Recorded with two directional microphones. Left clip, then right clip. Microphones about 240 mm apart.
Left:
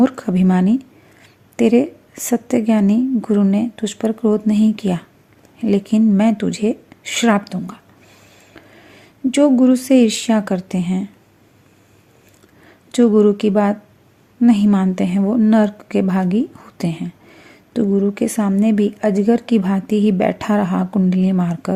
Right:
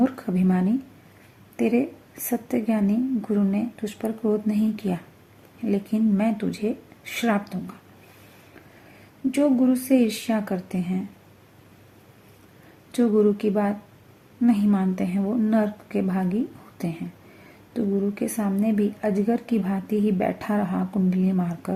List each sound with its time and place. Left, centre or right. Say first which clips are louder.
0.0 s speech: left 7 dB; left
9.3 s speech: left 8 dB; left
12.9 s speech: left 7 dB; left